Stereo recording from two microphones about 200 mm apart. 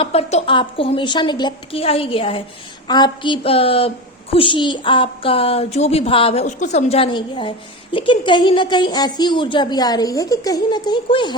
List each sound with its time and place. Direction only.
0.0 s a woman's voice: 30° left (ahead or behind)